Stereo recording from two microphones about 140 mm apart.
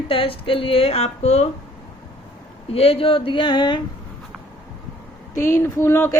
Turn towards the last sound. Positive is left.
turn(degrees=20)  # may be behind; listen again after turning